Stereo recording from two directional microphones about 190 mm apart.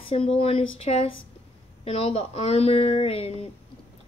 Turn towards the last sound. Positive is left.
turn(degrees=30)  # may be behind; listen again after turning